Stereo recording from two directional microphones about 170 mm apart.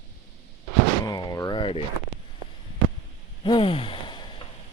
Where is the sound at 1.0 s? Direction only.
25° left (ahead or behind).